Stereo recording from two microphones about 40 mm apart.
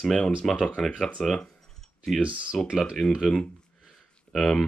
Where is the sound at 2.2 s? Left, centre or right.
Right.